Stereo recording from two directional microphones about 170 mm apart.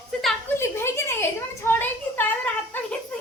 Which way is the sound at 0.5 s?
15° left (ahead or behind).